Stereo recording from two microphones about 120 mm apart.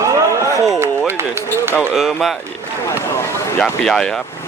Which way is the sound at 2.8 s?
20° left (ahead or behind).